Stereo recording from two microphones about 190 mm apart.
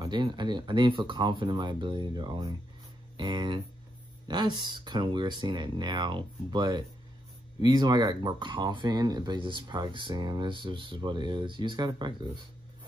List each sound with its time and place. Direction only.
0.0 s speech: 25° right (ahead or behind)